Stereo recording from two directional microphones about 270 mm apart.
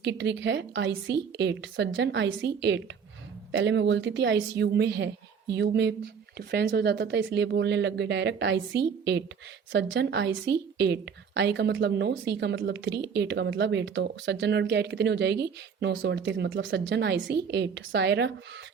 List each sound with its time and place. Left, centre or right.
0.0 s speech: right